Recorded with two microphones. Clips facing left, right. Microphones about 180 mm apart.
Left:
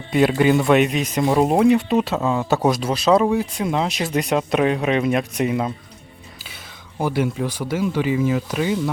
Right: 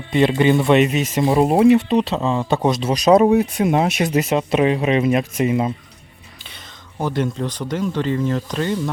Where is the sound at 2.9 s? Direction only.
15° right (ahead or behind).